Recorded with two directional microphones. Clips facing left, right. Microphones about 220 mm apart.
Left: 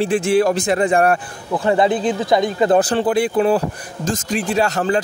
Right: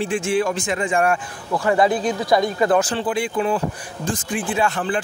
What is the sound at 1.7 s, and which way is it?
Speech, 25° left (ahead or behind).